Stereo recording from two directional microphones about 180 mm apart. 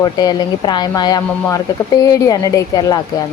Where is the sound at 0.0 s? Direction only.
20° left (ahead or behind).